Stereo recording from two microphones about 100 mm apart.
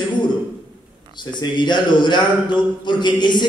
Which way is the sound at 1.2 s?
50° left (ahead or behind).